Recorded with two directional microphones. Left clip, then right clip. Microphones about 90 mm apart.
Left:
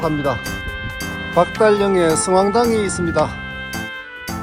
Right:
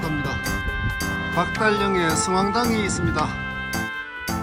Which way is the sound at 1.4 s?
15° right (ahead or behind).